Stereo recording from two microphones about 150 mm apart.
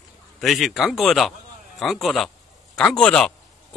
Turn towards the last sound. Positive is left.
turn(degrees=5)  # may be behind; listen again after turning